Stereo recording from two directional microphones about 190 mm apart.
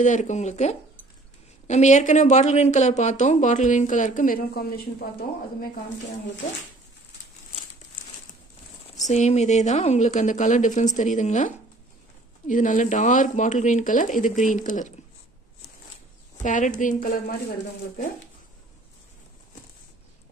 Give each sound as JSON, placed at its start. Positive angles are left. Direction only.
{"t": 0.0, "sound": "speech", "side_deg": 40}
{"t": 9.0, "sound": "speech", "side_deg": 40}
{"t": 16.4, "sound": "speech", "side_deg": 40}